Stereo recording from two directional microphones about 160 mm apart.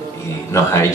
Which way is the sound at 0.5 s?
20° left (ahead or behind).